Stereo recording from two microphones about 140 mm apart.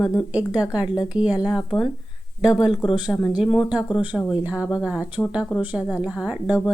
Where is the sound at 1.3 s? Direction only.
25° left (ahead or behind).